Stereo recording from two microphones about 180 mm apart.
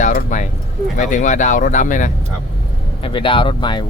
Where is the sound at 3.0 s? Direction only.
30° left (ahead or behind).